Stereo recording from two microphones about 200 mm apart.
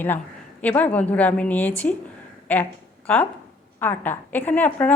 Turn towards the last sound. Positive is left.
turn(degrees=10)  # may be behind; listen again after turning